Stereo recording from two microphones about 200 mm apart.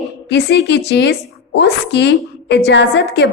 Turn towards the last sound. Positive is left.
turn(degrees=55)  # may be behind; listen again after turning